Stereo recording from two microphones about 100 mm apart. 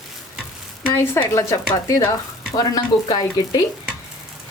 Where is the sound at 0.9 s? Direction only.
25° left (ahead or behind); by 3.6 s 40° left (ahead or behind).